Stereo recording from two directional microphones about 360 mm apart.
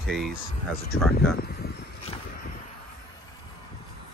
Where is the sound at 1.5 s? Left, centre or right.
Left.